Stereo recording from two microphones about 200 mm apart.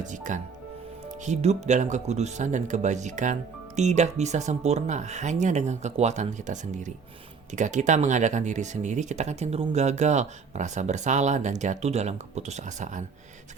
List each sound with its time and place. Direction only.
0.0 s speech: 40° right (ahead or behind)